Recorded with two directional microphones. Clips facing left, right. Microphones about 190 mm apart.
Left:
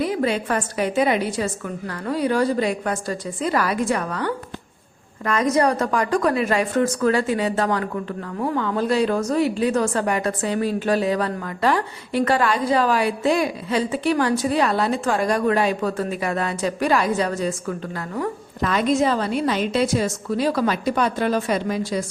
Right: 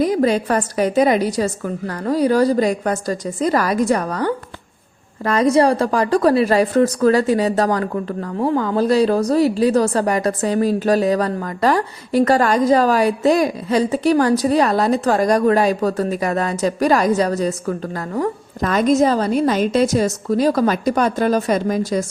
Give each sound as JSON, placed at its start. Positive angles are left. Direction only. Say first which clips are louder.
{"t": 0.0, "sound": "a woman's voice", "louder": "right 5 dB", "side_deg": -40}